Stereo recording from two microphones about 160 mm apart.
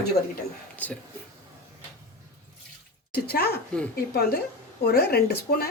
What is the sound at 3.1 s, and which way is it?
Speech, 75° left (ahead or behind).